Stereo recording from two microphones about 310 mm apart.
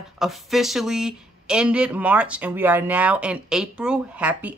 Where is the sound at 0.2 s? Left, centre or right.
Centre.